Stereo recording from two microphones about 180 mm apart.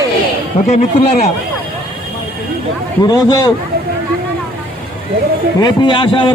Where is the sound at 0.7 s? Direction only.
40° left (ahead or behind).